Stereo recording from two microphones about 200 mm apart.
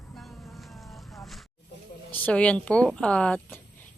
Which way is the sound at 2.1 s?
5° left (ahead or behind).